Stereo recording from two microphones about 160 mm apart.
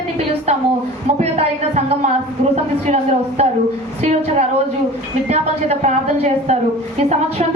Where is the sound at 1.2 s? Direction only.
40° right (ahead or behind).